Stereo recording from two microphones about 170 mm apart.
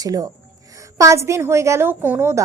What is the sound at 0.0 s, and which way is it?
A woman's voice, 20° right (ahead or behind).